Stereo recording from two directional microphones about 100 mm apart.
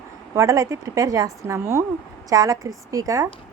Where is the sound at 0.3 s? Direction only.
30° right (ahead or behind).